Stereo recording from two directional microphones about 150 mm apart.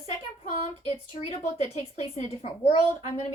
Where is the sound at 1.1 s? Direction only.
40° left (ahead or behind).